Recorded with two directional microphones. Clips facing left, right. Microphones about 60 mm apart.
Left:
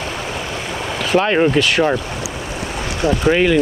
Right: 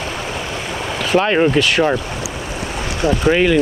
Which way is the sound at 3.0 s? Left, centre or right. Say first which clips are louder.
Even; right.